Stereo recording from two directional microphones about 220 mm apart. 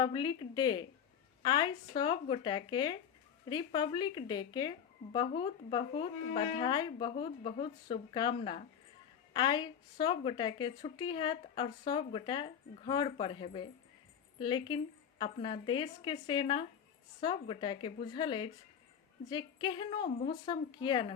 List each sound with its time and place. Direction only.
0.0 s a woman's voice: 20° left (ahead or behind)